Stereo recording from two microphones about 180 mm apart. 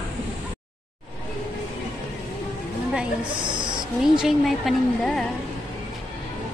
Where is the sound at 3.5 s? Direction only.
25° right (ahead or behind).